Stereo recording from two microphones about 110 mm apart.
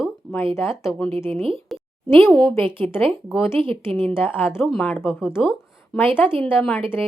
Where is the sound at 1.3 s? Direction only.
60° right (ahead or behind).